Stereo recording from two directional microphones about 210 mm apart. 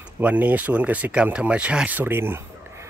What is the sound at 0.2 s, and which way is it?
Speech, 5° right (ahead or behind).